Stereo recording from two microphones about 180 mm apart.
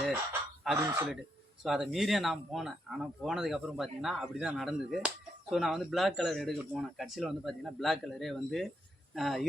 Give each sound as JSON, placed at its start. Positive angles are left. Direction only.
{"t": 0.8, "sound": "speech", "side_deg": -15}
{"t": 1.6, "sound": "speech", "side_deg": 0}